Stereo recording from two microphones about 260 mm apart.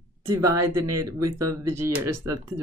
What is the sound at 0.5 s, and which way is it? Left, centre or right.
Speech, right.